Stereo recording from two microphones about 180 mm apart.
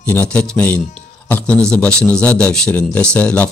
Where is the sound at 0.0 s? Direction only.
10° left (ahead or behind).